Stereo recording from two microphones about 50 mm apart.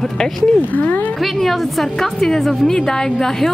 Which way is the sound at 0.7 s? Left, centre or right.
Left.